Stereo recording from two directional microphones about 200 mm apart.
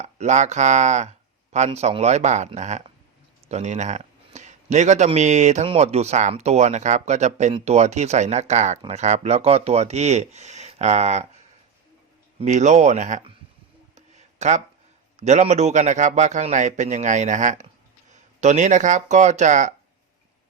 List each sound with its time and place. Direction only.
0.0 s speech: 35° right (ahead or behind)
13.9 s a sound: 35° right (ahead or behind)
15.2 s speech: 35° right (ahead or behind)